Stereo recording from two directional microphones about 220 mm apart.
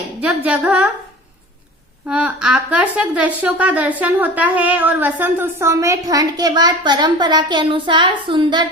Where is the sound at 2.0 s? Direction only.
5° right (ahead or behind).